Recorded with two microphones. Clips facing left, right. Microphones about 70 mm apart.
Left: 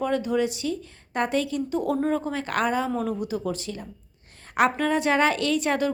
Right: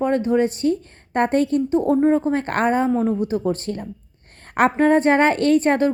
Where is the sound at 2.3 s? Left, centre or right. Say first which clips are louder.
Right 6 dB; right.